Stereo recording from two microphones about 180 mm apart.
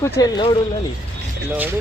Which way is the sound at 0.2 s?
25° left (ahead or behind).